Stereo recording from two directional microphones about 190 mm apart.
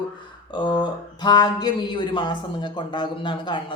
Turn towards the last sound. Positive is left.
turn(degrees=25)  # may be behind; listen again after turning